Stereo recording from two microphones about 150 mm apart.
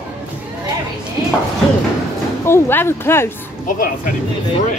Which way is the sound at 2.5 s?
15° left (ahead or behind).